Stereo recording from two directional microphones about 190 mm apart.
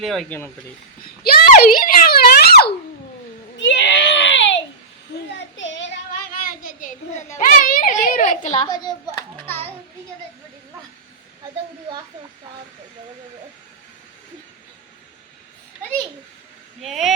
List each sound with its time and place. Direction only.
0.0 s speech: centre (ahead or behind)
1.0 s a sound: 55° left (ahead or behind)
3.6 s baby cry: 70° left (ahead or behind)
5.4 s child singing: 75° left (ahead or behind)
6.5 s children playing: 45° left (ahead or behind)
8.0 s a sound: 45° left (ahead or behind)
8.6 s speech: 20° left (ahead or behind)
9.3 s a sound: 10° left (ahead or behind)
16.8 s speech: centre (ahead or behind)